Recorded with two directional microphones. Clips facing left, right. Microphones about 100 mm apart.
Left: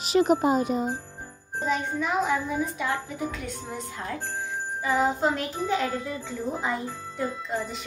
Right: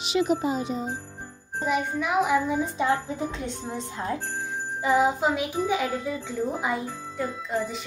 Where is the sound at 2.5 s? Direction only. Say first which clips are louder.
Right 4 dB; 25° right (ahead or behind).